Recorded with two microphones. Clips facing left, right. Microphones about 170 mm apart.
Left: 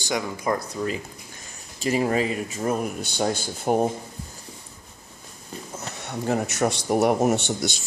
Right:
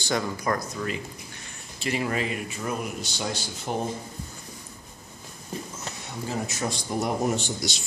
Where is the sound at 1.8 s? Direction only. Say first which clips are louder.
Left 5 dB; 40° left (ahead or behind).